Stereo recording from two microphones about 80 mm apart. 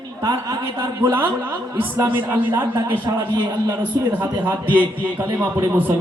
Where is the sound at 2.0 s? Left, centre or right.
Right.